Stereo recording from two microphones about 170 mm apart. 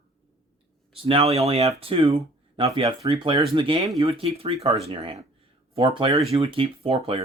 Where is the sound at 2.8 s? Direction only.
20° right (ahead or behind).